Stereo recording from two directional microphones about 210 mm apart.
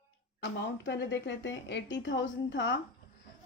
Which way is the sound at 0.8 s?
55° left (ahead or behind).